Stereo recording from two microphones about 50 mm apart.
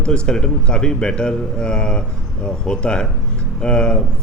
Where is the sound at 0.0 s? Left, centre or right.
Centre.